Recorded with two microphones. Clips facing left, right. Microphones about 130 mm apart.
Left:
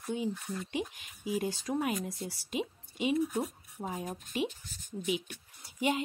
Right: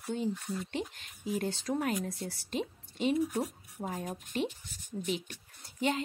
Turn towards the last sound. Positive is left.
turn(degrees=10)  # may be behind; listen again after turning